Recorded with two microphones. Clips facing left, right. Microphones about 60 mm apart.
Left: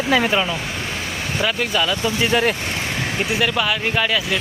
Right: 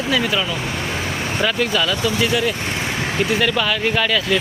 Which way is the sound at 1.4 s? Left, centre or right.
Centre.